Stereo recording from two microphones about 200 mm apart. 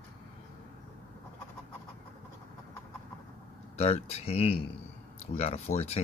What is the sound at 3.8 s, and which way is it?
Speech, 30° left (ahead or behind).